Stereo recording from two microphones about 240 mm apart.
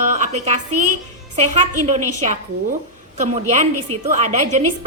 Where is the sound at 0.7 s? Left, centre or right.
Right.